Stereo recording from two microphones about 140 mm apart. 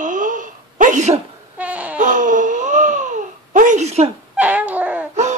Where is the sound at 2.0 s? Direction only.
65° right (ahead or behind); by 4.1 s 50° right (ahead or behind).